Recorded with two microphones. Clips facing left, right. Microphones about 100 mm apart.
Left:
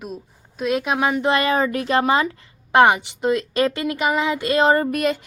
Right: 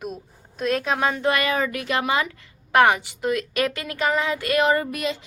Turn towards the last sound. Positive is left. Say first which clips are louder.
# left 6 dB
turn(degrees=50)  # may be behind; listen again after turning